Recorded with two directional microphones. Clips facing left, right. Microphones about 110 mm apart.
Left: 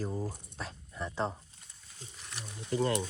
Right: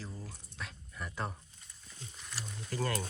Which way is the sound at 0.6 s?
30° left (ahead or behind).